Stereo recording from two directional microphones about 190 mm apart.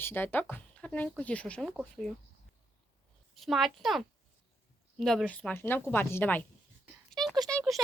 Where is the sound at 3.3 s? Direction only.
Centre (ahead or behind).